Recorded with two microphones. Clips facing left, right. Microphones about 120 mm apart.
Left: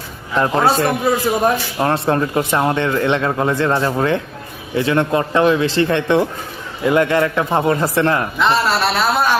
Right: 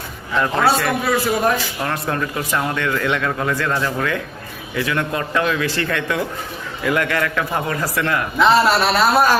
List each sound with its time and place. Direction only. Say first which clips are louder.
0.3 s speech: left 2 dB; 30° left (ahead or behind)
8.4 s a man's voice: right 6 dB; 5° right (ahead or behind)